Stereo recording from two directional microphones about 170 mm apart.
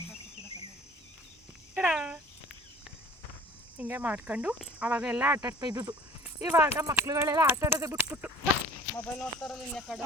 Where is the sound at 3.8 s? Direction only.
10° right (ahead or behind).